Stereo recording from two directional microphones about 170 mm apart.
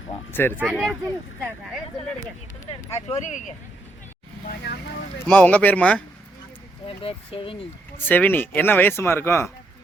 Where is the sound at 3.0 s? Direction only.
45° left (ahead or behind).